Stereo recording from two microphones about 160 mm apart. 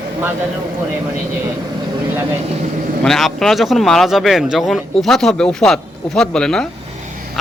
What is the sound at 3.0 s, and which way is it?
Speech, centre (ahead or behind).